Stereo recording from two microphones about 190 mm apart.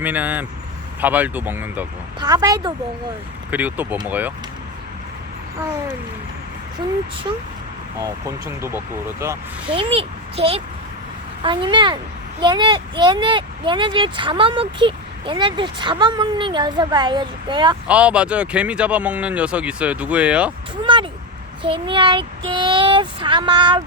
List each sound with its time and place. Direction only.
0.0 s speech: 10° right (ahead or behind)
2.2 s speech: 20° right (ahead or behind)
3.5 s speech: 10° right (ahead or behind)
7.9 s speech: 15° right (ahead or behind)
9.7 s a child's voice: 30° right (ahead or behind)
17.8 s speech: 5° right (ahead or behind)
20.8 s a sound: 25° right (ahead or behind)
21.6 s speech: 25° right (ahead or behind)